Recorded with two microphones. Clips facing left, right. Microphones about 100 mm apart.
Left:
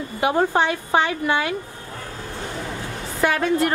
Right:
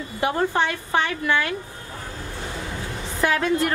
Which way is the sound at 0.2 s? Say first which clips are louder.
Left 3 dB; 20° left (ahead or behind).